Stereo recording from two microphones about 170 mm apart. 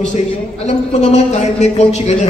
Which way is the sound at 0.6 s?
40° left (ahead or behind).